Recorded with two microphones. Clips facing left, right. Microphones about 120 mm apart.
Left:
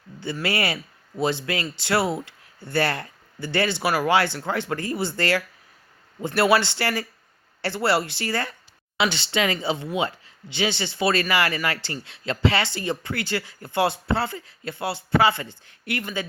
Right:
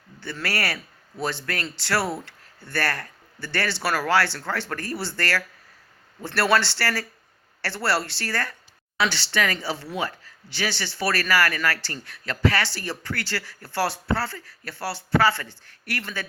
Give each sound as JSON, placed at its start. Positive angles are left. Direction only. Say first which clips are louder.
{"t": 0.2, "sound": "a man's voice", "louder": "left 3 dB", "side_deg": 15}